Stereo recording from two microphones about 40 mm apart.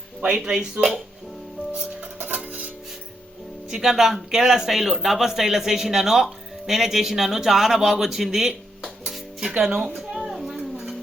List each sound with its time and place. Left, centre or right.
0.3 s speech: centre
2.2 s music: right
3.7 s speech: centre
9.6 s speech: centre
10.0 s a sound: centre